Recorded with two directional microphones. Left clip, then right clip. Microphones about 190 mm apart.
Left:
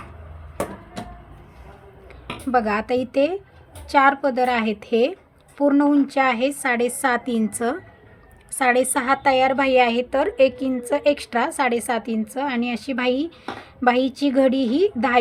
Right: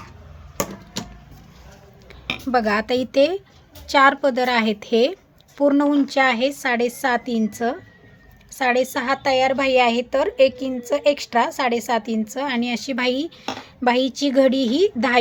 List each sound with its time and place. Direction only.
2.5 s a woman's voice: 20° right (ahead or behind)